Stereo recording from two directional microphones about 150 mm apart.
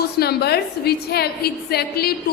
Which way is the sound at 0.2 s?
90° left.